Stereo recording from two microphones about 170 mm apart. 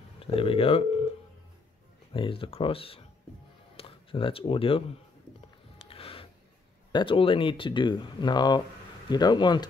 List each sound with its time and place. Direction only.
0.2 s speech: 35° left (ahead or behind)
2.1 s speech: 30° left (ahead or behind)
5.9 s a sound: 30° left (ahead or behind)
6.9 s speech: 30° left (ahead or behind)